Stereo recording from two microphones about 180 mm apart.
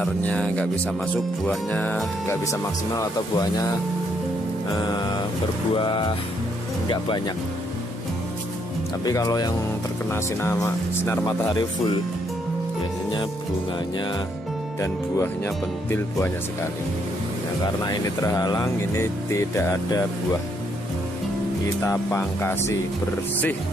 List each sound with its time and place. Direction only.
0.0 s speech: 5° left (ahead or behind)
4.7 s speech: 25° left (ahead or behind)
9.0 s speech: 20° left (ahead or behind)
14.8 s speech: 15° left (ahead or behind)
17.8 s speech: 20° left (ahead or behind)
21.8 s speech: 15° left (ahead or behind)